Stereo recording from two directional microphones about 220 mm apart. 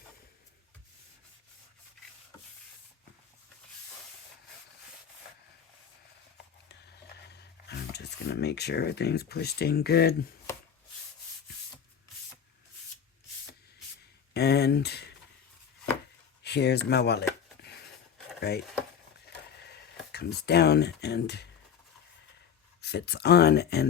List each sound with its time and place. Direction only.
7.3 s speech: 50° left (ahead or behind)
14.3 s a sound: 45° left (ahead or behind)
16.4 s speech: 50° left (ahead or behind)
18.3 s a sound: 45° left (ahead or behind)
19.6 s speech: 50° left (ahead or behind)
22.8 s speech: 50° left (ahead or behind)